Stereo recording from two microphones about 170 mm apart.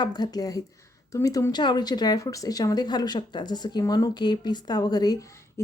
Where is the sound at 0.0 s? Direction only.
25° left (ahead or behind).